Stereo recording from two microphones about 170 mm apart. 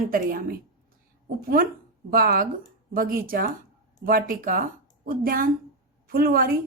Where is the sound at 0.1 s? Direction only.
55° right (ahead or behind).